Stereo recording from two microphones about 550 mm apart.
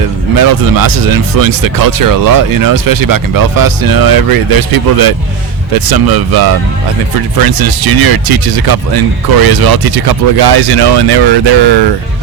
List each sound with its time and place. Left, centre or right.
0.3 s speech: right